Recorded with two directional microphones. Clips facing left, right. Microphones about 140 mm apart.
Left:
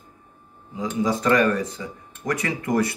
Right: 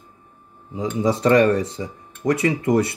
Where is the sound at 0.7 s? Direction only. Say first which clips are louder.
Right 2 dB; 30° right (ahead or behind).